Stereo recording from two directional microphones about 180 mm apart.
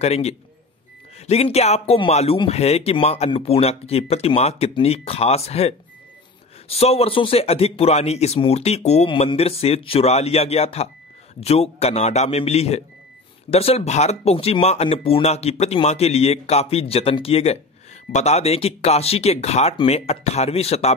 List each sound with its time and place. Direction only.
0.0 s speech: 35° left (ahead or behind)
6.8 s speech: 35° left (ahead or behind)